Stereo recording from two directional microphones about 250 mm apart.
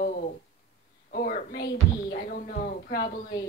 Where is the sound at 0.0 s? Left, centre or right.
Left.